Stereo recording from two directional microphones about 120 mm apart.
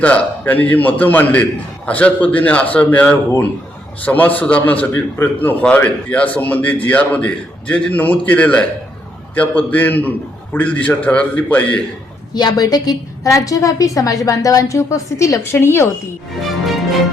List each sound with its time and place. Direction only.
0.0 s a man's voice: 10° left (ahead or behind)
12.3 s a woman's voice: 35° left (ahead or behind)